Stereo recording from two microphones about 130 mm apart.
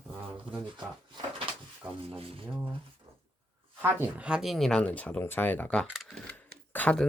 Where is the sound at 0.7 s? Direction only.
40° right (ahead or behind).